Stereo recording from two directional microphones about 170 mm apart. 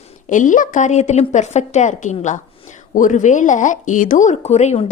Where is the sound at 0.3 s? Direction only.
50° left (ahead or behind).